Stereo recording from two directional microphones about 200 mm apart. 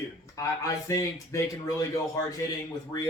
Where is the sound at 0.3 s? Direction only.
15° left (ahead or behind).